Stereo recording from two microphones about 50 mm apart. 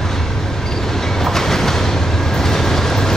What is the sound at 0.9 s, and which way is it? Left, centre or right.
Train, centre.